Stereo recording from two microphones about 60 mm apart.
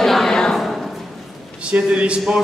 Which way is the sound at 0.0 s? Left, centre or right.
Centre.